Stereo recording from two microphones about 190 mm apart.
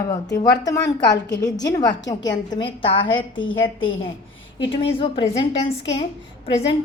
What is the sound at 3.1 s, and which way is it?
Speech, 90° left.